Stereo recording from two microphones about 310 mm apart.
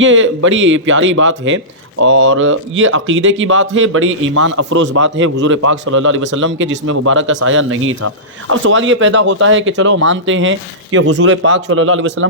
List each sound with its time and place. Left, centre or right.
0.0 s speech: right